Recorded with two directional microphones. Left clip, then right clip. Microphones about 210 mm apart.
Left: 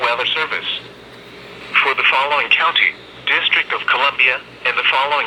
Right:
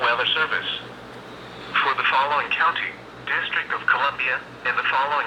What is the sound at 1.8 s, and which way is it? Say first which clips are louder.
Speech: left 5 dB; 15° left (ahead or behind).